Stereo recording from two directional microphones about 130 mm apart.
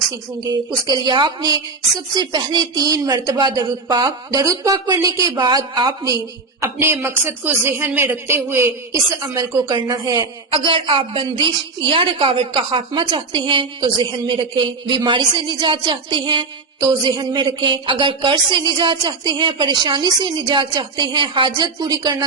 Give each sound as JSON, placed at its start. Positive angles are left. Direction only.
{"t": 0.9, "sound": "a woman's voice", "side_deg": -35}
{"t": 6.6, "sound": "a man's voice", "side_deg": -20}
{"t": 10.5, "sound": "a woman's voice", "side_deg": -45}